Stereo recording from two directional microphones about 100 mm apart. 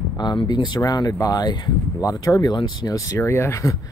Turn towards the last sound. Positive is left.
turn(degrees=25)  # may be behind; listen again after turning